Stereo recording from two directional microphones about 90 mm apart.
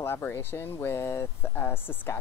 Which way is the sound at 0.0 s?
25° left (ahead or behind).